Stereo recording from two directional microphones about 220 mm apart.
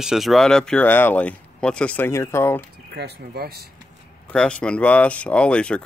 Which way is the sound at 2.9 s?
50° right (ahead or behind).